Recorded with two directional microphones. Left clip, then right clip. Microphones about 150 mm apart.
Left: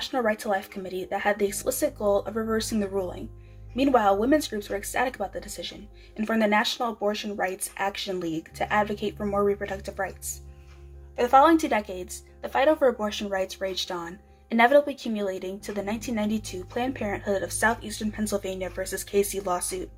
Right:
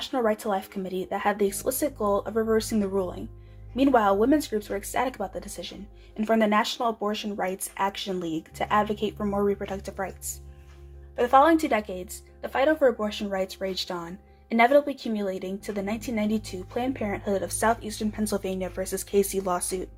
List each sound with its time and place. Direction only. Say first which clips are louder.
0.0 s a woman's voice: even; 40° right (ahead or behind)
9.1 s a woman's voice: left 4 dB; 35° right (ahead or behind)
11.2 s a woman's voice: left 1 dB; 40° right (ahead or behind)